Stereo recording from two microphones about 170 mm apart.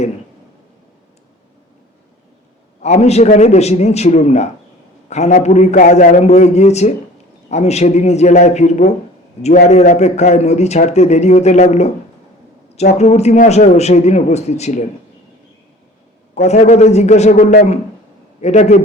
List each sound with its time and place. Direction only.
2.8 s a man's voice: 40° left (ahead or behind)
13.0 s a man's voice: 40° left (ahead or behind)
16.3 s a man's voice: 40° left (ahead or behind)